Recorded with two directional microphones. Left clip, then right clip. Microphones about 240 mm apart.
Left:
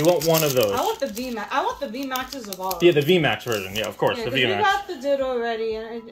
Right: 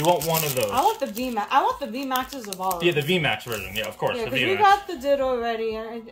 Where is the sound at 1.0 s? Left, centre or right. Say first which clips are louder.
Right 1 dB; right.